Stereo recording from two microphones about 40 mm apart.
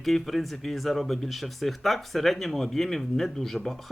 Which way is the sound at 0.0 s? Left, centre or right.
Centre.